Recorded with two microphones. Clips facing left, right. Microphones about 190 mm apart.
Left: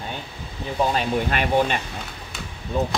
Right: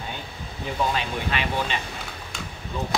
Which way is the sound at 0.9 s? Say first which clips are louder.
Left 5 dB; 45° left (ahead or behind).